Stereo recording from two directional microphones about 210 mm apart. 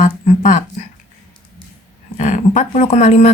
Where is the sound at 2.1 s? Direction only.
35° left (ahead or behind).